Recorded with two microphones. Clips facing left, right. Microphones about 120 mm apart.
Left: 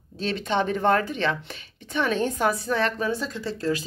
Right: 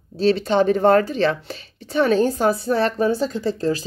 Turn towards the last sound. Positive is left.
turn(degrees=-30)  # may be behind; listen again after turning